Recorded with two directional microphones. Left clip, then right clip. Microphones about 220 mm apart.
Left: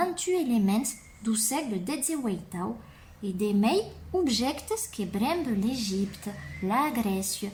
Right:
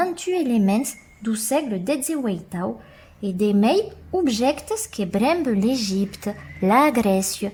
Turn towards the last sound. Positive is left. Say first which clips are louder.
# right 11 dB
turn(degrees=-45)  # may be behind; listen again after turning